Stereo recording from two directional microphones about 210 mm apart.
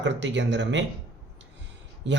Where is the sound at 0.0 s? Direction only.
60° right (ahead or behind).